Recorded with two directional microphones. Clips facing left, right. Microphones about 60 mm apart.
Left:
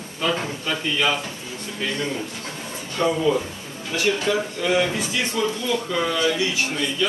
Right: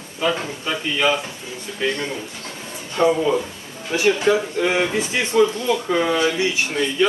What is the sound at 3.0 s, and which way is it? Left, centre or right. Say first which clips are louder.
Speech: right 3 dB; right.